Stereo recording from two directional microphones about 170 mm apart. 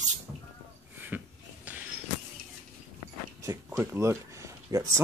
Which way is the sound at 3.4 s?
20° right (ahead or behind).